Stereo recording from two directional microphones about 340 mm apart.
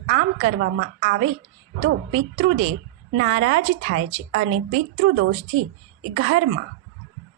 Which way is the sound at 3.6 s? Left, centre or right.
Centre.